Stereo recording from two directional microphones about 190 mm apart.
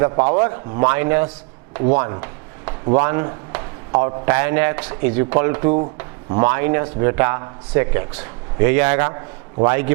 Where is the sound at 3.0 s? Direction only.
20° right (ahead or behind).